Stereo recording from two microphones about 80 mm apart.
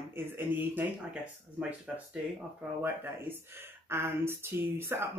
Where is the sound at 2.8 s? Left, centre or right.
Right.